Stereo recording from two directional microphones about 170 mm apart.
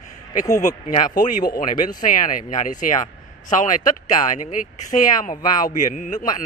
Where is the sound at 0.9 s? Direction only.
55° left (ahead or behind).